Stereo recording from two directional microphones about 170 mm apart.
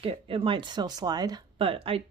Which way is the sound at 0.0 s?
35° right (ahead or behind).